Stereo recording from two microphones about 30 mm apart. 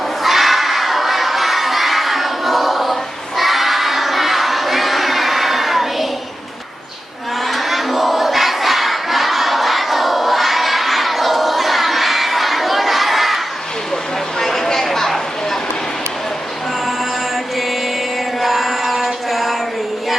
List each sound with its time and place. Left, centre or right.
0.2 s children shouting: centre
7.4 s crowd: centre
14.3 s a sound: centre
14.8 s chatter: centre
18.3 s music: centre